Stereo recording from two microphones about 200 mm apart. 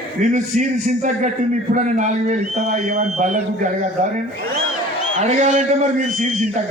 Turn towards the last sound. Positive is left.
turn(degrees=-40)  # may be behind; listen again after turning